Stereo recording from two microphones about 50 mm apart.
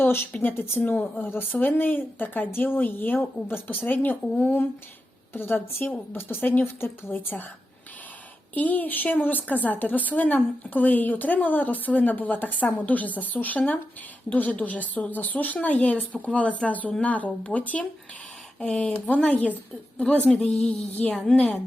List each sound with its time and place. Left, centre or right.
0.0 s a woman's voice: left
5.3 s a woman's voice: left
8.5 s a woman's voice: left
20.4 s a woman's voice: centre
20.7 s a woman's voice: left
21.2 s a woman's voice: centre